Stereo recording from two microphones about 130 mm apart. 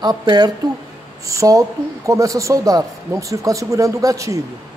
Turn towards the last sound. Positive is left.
turn(degrees=-25)  # may be behind; listen again after turning